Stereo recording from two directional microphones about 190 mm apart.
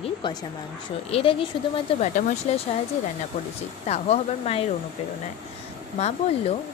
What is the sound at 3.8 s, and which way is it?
Speech, 35° left (ahead or behind).